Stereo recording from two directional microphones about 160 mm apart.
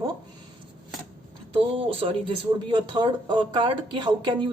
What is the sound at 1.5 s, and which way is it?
Speech, 35° right (ahead or behind).